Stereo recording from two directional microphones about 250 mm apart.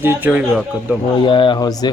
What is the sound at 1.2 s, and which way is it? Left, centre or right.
Speech, centre.